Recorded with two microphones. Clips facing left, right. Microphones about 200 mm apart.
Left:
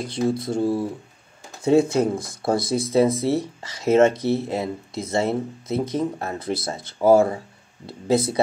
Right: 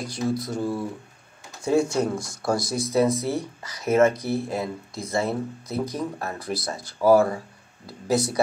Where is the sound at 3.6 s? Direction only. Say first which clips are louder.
Left 2 dB; 25° left (ahead or behind).